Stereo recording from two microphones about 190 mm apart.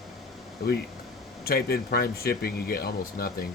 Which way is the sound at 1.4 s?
55° left (ahead or behind).